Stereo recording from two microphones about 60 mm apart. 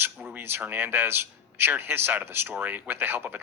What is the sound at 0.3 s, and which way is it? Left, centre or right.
A man's voice, right.